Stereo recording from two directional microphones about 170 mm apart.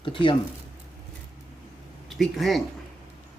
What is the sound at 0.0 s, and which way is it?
Speech, 30° left (ahead or behind).